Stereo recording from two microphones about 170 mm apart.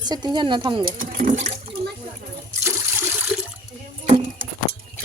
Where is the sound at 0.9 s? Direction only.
50° right (ahead or behind).